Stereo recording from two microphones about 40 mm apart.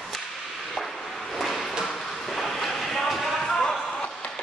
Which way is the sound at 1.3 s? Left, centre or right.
Centre.